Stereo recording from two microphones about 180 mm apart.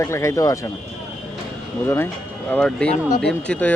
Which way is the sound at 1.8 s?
10° left (ahead or behind).